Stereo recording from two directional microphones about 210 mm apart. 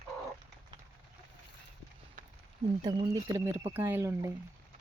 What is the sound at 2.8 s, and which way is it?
Speech, 20° right (ahead or behind).